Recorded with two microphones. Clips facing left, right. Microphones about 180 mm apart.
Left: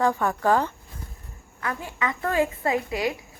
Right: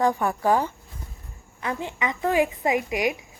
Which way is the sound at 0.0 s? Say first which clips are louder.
Even; 15° right (ahead or behind).